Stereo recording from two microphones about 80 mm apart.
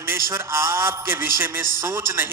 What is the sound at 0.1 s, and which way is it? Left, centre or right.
A man's voice, right.